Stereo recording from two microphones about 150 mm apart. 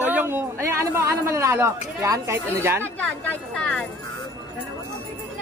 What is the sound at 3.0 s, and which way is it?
Speech, 5° left (ahead or behind).